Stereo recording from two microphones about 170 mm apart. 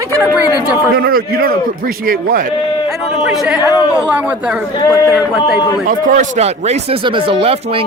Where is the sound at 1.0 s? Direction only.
60° right (ahead or behind).